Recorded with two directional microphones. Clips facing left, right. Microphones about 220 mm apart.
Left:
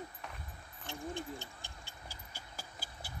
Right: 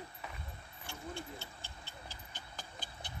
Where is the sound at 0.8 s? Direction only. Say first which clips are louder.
Left 4 dB; 15° left (ahead or behind).